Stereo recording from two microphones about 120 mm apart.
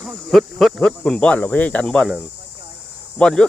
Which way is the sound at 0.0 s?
Centre (ahead or behind).